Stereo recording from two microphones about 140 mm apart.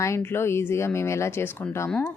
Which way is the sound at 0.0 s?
20° left (ahead or behind).